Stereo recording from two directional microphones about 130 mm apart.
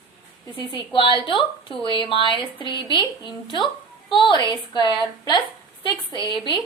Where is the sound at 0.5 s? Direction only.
40° left (ahead or behind).